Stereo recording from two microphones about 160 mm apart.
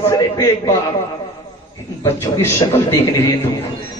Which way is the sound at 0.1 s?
20° left (ahead or behind).